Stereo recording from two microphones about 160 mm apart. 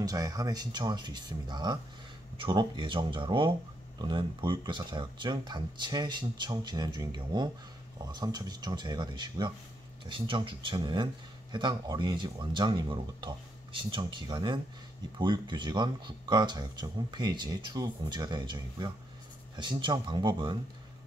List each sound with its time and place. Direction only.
0.0 s speech: 20° right (ahead or behind)